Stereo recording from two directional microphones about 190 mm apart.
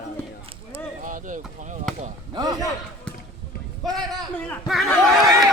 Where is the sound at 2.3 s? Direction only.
20° right (ahead or behind).